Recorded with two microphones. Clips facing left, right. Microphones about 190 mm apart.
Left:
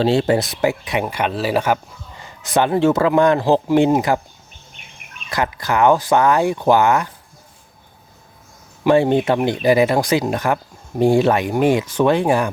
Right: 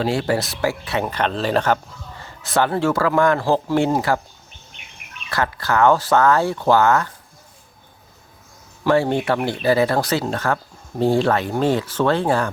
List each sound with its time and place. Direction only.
0.0 s speech: 25° left (ahead or behind)
5.3 s speech: 15° left (ahead or behind)
8.8 s speech: 20° left (ahead or behind)